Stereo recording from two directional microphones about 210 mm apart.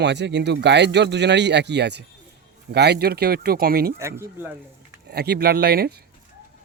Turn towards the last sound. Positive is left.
turn(degrees=-50)  # may be behind; listen again after turning